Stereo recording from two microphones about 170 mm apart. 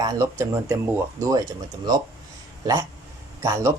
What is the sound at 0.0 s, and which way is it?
A man's voice, 20° right (ahead or behind).